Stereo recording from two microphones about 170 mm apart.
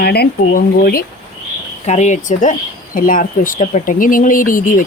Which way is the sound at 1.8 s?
45° left (ahead or behind).